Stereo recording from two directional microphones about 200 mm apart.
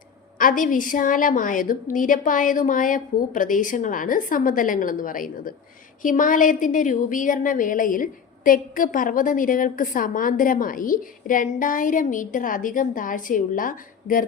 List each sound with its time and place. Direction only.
0.3 s a woman's voice: 45° left (ahead or behind)